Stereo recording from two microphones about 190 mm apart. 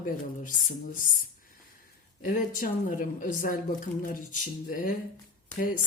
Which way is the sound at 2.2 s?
45° left (ahead or behind).